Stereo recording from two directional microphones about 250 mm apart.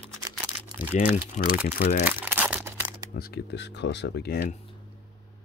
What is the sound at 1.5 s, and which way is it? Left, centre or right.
Speech, left.